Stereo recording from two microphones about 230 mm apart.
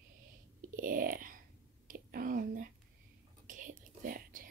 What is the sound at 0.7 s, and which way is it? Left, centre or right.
Whispering, right.